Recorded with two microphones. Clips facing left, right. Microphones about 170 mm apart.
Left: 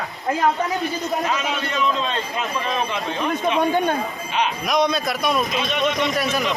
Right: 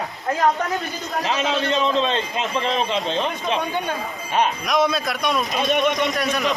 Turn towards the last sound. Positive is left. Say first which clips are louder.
# even
turn(degrees=0)  # may be behind; listen again after turning